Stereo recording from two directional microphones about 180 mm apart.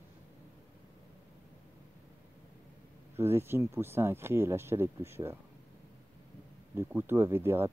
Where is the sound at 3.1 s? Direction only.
15° right (ahead or behind).